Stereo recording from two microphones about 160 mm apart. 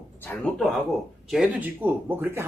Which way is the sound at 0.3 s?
5° left (ahead or behind).